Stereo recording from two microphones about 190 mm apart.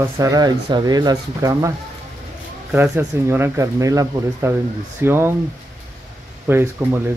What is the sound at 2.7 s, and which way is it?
Speech, 10° right (ahead or behind).